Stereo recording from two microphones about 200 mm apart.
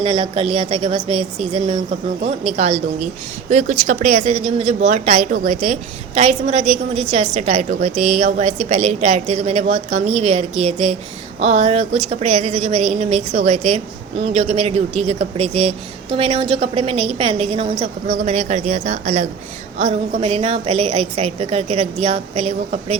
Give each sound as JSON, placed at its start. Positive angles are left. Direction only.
{"t": 0.0, "sound": "a woman's voice", "side_deg": -30}